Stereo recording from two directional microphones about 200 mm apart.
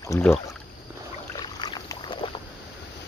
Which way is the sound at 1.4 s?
20° left (ahead or behind).